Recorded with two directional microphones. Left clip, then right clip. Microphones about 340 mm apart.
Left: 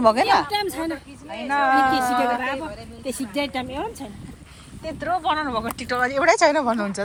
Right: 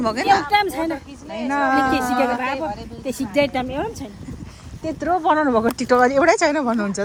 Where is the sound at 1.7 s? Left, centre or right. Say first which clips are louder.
Left 1 dB; centre.